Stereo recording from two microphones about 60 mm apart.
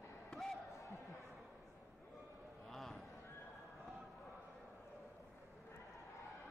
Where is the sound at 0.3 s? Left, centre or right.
Centre.